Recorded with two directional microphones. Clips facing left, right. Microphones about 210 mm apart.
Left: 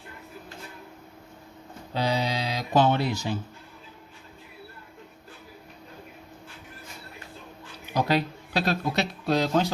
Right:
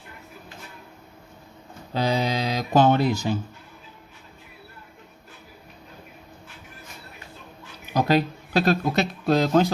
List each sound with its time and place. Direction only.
2.0 s speech: 50° right (ahead or behind)
7.9 s speech: 45° right (ahead or behind)